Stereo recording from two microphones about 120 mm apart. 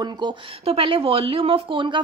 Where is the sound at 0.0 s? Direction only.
40° right (ahead or behind).